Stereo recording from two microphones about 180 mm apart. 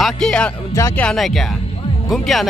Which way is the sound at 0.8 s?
15° left (ahead or behind).